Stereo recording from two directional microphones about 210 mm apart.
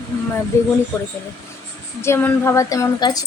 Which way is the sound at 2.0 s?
10° left (ahead or behind).